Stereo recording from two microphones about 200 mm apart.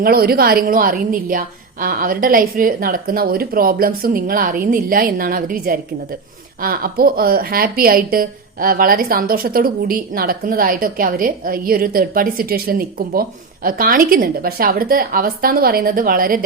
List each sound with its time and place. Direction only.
0.0 s speech: 50° right (ahead or behind)